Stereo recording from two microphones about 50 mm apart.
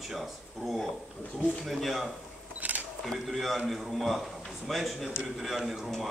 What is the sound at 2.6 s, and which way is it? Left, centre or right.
Camera, right.